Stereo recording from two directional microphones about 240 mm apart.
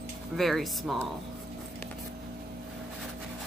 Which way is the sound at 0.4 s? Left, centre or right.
Centre.